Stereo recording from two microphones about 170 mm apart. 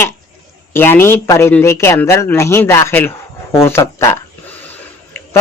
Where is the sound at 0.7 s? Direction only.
15° left (ahead or behind).